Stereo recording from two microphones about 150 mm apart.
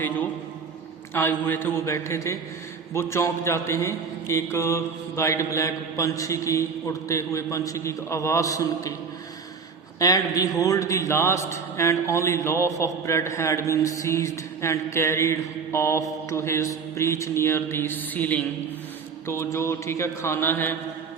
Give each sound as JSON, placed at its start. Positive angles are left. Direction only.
{"t": 1.1, "sound": "mantra", "side_deg": 15}
{"t": 2.9, "sound": "a man's voice", "side_deg": 15}
{"t": 10.0, "sound": "a man's voice", "side_deg": 25}
{"t": 19.3, "sound": "mantra", "side_deg": 20}